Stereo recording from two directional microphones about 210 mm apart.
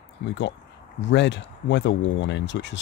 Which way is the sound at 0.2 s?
60° left (ahead or behind).